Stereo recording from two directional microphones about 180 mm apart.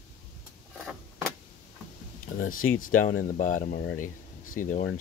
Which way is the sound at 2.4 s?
50° left (ahead or behind).